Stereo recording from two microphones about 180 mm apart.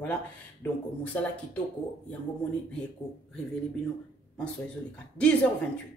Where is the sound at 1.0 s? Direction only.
10° left (ahead or behind).